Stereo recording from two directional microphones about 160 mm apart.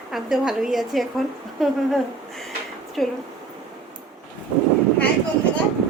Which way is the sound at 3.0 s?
Centre (ahead or behind).